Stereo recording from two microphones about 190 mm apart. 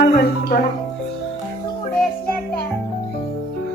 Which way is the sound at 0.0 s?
55° left (ahead or behind).